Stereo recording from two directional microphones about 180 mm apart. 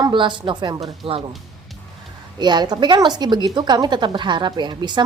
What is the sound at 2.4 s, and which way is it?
Speech, 25° right (ahead or behind).